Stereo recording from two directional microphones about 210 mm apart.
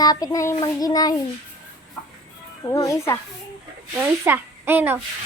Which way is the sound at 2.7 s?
15° left (ahead or behind).